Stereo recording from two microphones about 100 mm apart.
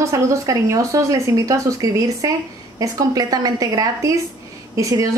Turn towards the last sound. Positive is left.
turn(degrees=-35)  # may be behind; listen again after turning